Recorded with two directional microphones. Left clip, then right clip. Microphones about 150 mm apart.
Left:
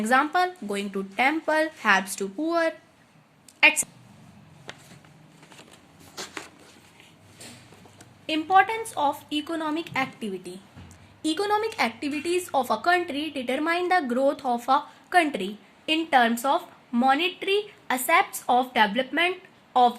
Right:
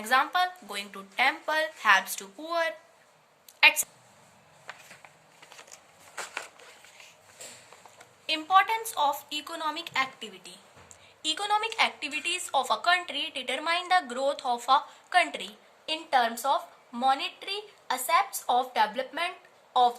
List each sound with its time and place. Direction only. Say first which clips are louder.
0.0 s a woman's voice: left 3 dB; 50° left (ahead or behind)
7.9 s a woman's voice: left 2 dB; 45° left (ahead or behind)